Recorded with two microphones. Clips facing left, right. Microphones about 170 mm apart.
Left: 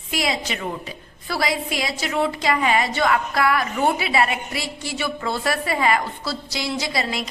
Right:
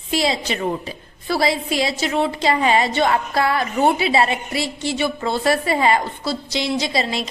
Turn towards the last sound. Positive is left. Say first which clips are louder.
# right 3 dB
turn(degrees=-25)  # may be behind; listen again after turning